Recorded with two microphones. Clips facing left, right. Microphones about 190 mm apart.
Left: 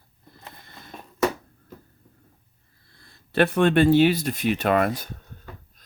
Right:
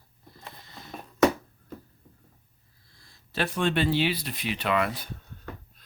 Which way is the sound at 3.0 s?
60° left (ahead or behind).